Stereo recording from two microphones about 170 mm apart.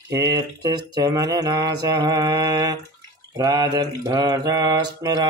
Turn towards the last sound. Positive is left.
turn(degrees=-20)  # may be behind; listen again after turning